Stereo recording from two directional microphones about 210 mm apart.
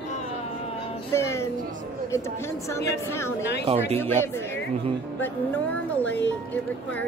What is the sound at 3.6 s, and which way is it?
Speech, 30° right (ahead or behind).